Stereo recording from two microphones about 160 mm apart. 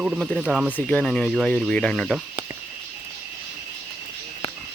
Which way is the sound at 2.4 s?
60° left (ahead or behind).